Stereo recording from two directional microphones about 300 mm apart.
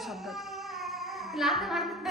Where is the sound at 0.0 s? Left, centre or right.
Centre.